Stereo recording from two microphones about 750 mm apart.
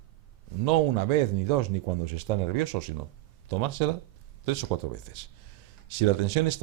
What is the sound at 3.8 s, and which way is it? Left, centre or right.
Speech, right.